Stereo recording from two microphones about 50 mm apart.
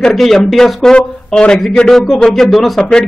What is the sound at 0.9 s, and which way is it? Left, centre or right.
Speech, centre.